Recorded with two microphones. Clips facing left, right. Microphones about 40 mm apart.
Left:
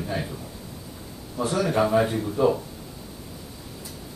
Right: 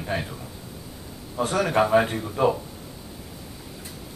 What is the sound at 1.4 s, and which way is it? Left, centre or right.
Speech, right.